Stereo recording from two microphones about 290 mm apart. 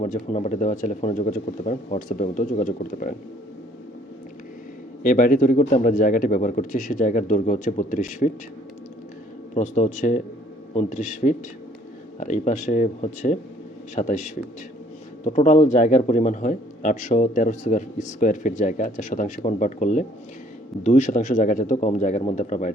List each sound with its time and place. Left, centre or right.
0.0 s a man's voice: left
5.0 s a man's voice: left
9.6 s a man's voice: left